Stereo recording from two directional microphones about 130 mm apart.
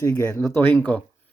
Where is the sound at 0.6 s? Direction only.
10° left (ahead or behind).